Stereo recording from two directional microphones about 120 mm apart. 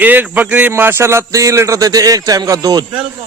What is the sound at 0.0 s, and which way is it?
A man's voice, 15° right (ahead or behind).